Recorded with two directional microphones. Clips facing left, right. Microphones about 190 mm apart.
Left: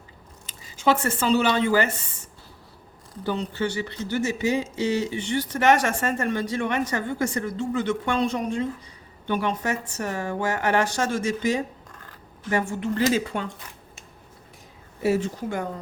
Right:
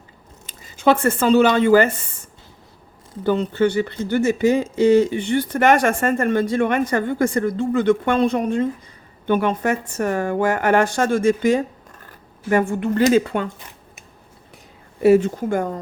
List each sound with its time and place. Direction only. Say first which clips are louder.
0.4 s speech: right 5 dB; 55° right (ahead or behind)
3.2 s a woman's voice: right 8 dB; 55° right (ahead or behind)
15.0 s speech: right 9 dB; 60° right (ahead or behind)